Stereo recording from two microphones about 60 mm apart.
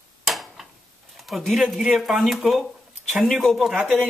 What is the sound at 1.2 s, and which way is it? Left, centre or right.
A man's voice, centre.